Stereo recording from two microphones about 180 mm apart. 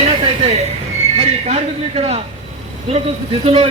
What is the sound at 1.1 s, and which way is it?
A man's voice, 35° right (ahead or behind).